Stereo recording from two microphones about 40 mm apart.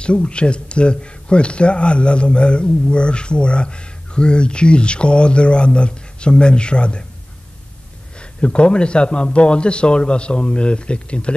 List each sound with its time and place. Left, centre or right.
0.0 s a man's voice: left
8.2 s a man's voice: left